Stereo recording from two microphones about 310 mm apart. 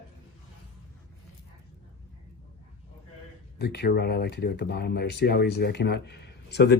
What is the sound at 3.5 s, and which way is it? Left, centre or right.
Speech, left.